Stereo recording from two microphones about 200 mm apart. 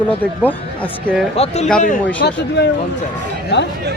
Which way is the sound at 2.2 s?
55° left (ahead or behind).